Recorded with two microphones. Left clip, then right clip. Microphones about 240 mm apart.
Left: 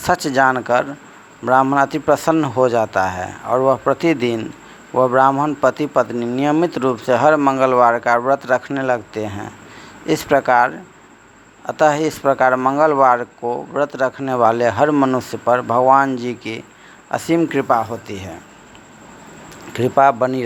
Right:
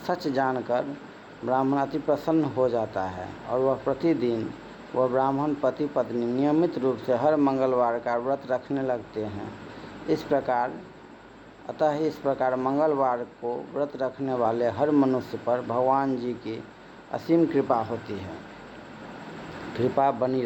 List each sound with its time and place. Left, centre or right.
0.0 s speech: left
3.5 s speech: left
3.9 s speech: left
4.9 s speech: left
5.5 s speech: left
15.6 s speech: left
15.9 s speech: left
19.7 s speech: left